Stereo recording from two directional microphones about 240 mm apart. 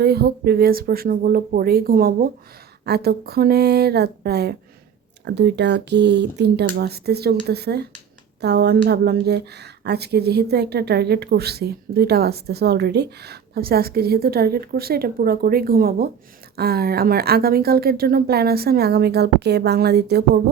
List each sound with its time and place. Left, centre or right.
0.0 s speech: right